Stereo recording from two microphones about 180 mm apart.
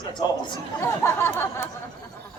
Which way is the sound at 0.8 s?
15° left (ahead or behind).